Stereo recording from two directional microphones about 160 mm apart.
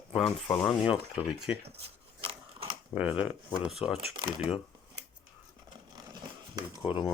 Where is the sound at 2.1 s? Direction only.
30° right (ahead or behind).